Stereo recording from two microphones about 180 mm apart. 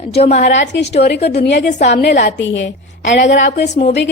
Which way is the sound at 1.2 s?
65° left (ahead or behind).